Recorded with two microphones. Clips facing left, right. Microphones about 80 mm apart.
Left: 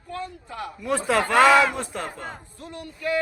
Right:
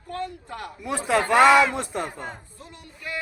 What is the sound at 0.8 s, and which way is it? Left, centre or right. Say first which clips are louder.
Speech: left 1 dB; centre.